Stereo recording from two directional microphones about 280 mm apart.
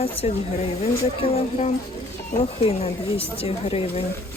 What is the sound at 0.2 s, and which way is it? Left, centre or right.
A woman's voice, left.